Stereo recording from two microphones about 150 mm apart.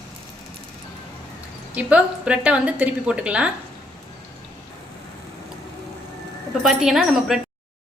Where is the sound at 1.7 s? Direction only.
5° right (ahead or behind).